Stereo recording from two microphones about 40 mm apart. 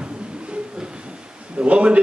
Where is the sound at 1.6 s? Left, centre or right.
Right.